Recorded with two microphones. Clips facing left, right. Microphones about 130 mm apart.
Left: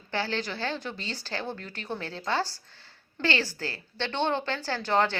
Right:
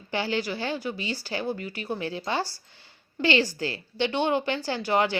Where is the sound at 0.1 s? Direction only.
15° right (ahead or behind).